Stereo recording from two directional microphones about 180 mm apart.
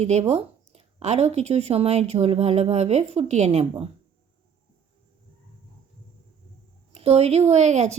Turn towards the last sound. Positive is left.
turn(degrees=-40)  # may be behind; listen again after turning